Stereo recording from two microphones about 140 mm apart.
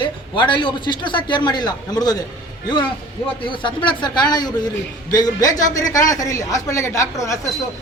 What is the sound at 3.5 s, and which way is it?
Speech, 35° left (ahead or behind).